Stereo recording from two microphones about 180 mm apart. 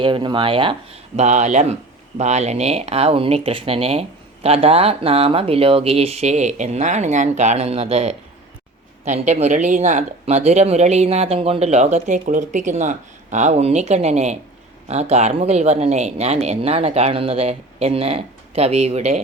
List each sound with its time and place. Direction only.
0.0 s speech: 25° right (ahead or behind)
9.2 s speech: 40° right (ahead or behind)